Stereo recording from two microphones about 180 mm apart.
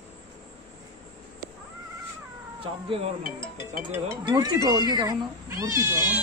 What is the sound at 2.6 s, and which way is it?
Cat, 30° right (ahead or behind).